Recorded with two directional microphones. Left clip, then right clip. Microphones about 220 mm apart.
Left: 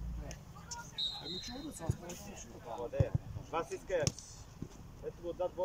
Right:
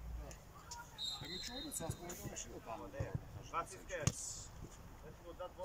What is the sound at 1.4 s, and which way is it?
Speech, 10° left (ahead or behind).